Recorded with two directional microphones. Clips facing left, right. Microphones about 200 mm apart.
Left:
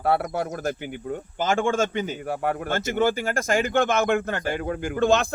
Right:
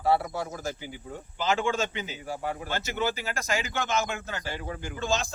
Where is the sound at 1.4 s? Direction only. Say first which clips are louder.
Left 4 dB; 50° left (ahead or behind).